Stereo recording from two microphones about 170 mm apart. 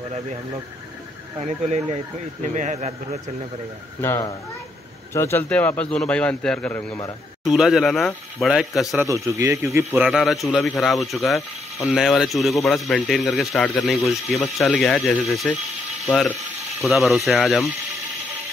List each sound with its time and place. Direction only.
1.4 s speech: 40° right (ahead or behind)
4.0 s a man's voice: 15° left (ahead or behind); by 8.8 s centre (ahead or behind)
8.9 s speech: 15° right (ahead or behind)
9.9 s a man's voice: centre (ahead or behind)
16.0 s ratchet: centre (ahead or behind)
16.3 s a man's voice: centre (ahead or behind)